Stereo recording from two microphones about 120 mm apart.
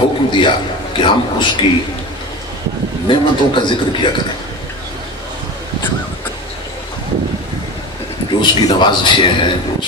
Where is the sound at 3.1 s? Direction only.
40° left (ahead or behind).